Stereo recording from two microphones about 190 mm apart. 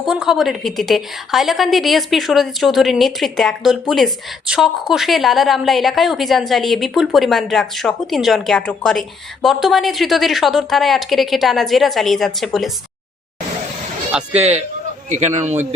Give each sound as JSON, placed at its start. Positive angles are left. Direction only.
{"t": 0.0, "sound": "a woman's voice", "side_deg": 0}
{"t": 14.3, "sound": "a man's voice", "side_deg": -35}